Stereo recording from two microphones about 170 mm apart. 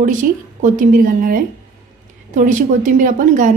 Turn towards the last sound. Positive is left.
turn(degrees=-50)  # may be behind; listen again after turning